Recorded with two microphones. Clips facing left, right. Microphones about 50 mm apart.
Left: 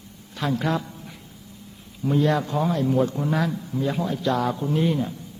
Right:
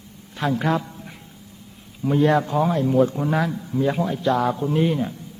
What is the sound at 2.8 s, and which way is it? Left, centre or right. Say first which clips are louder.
Speech: right 3 dB; centre.